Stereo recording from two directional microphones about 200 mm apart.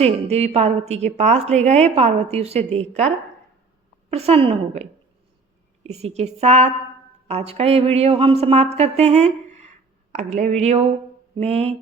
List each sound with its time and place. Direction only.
0.0 s a woman's voice: 30° right (ahead or behind)
4.1 s a woman's voice: 30° right (ahead or behind)